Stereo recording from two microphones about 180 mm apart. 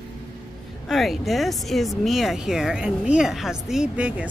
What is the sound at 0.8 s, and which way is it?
Speech, centre (ahead or behind).